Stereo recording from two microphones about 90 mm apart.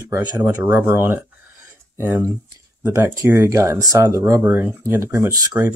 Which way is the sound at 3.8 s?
40° right (ahead or behind).